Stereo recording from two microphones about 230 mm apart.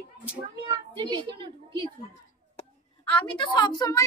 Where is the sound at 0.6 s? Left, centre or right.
Centre.